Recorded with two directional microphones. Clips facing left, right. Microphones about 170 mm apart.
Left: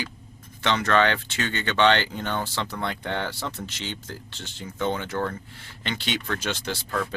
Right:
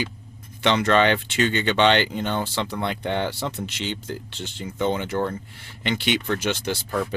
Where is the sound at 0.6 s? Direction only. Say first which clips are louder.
Right 3 dB; 15° right (ahead or behind).